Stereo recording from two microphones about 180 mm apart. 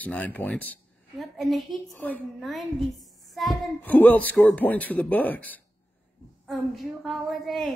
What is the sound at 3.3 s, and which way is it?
Child singing, centre (ahead or behind).